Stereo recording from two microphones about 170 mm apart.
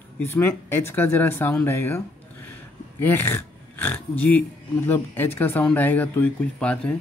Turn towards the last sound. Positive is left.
turn(degrees=5)  # may be behind; listen again after turning